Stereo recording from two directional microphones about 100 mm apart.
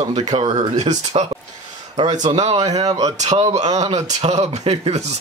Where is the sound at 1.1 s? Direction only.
90° right.